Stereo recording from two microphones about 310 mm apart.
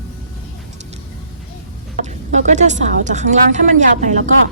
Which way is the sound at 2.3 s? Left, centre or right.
Right.